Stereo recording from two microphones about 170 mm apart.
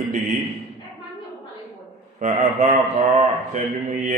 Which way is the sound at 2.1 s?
40° right (ahead or behind).